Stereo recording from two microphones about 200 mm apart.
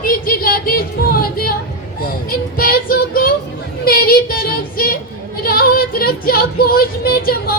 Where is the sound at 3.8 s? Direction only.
50° left (ahead or behind).